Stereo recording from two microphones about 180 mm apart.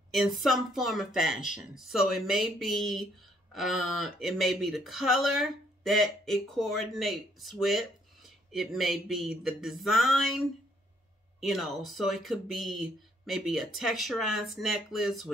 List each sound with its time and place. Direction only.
0.4 s speech: centre (ahead or behind)
11.4 s speech: centre (ahead or behind)